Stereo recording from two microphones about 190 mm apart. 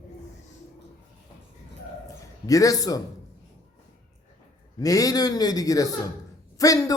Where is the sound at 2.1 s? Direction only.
15° left (ahead or behind).